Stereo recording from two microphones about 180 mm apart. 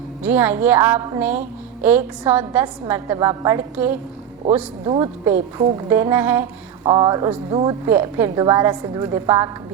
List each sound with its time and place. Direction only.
0.2 s a woman's voice: 10° right (ahead or behind)
6.8 s a woman's voice: 25° right (ahead or behind)
7.9 s a woman's voice: 10° right (ahead or behind)